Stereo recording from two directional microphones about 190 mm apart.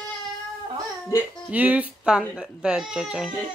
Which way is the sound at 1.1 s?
15° left (ahead or behind).